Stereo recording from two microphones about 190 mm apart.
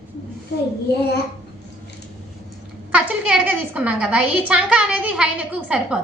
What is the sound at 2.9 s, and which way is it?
A woman's voice, 5° right (ahead or behind).